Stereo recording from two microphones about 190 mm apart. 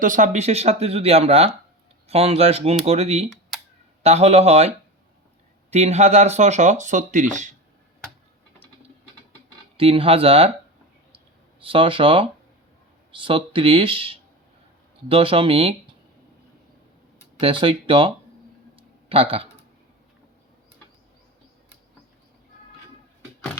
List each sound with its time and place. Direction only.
0.0 s speech: 40° right (ahead or behind)
5.7 s speech: 35° right (ahead or behind)
9.7 s speech: 30° right (ahead or behind)
11.6 s speech: 30° right (ahead or behind)
17.4 s speech: 25° right (ahead or behind)
18.8 s a sound: 30° right (ahead or behind)